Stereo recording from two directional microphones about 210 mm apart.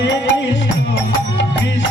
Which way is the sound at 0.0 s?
60° left (ahead or behind).